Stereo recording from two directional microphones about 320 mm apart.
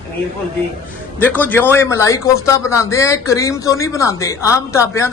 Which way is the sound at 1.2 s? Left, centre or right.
Centre.